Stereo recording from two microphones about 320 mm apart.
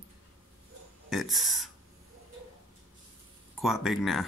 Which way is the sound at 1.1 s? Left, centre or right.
Centre.